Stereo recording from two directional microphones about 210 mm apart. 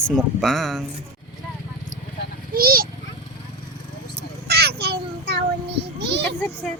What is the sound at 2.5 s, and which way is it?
Speech, 45° right (ahead or behind).